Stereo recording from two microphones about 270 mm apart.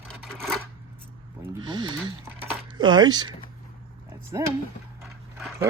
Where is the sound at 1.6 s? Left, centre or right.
Centre.